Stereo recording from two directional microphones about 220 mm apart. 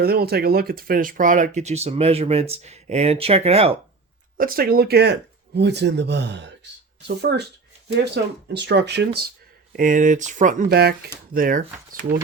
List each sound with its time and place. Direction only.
0.0 s speech: 45° right (ahead or behind); by 3.8 s 30° right (ahead or behind)
4.4 s speech: 40° right (ahead or behind)
9.7 s speech: 35° right (ahead or behind)